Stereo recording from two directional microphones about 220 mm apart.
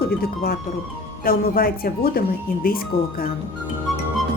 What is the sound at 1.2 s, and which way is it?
Speech, 40° left (ahead or behind).